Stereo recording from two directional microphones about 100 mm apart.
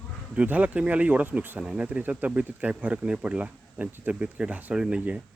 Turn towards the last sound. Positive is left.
turn(degrees=-15)  # may be behind; listen again after turning